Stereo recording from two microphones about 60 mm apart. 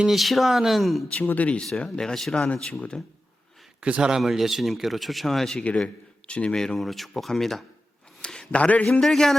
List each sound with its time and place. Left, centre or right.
0.1 s speech: centre
1.3 s speech: left
1.8 s a man's voice: centre
3.8 s a man's voice: centre
4.1 s speech: centre
5.7 s a man's voice: centre
6.7 s speech: centre
8.2 s a sound: centre
8.5 s speech: left
8.9 s a man's voice: centre